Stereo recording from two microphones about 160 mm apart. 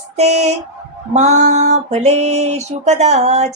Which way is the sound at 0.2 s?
45° right (ahead or behind).